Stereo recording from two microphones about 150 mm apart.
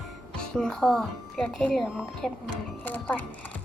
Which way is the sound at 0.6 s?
5° left (ahead or behind).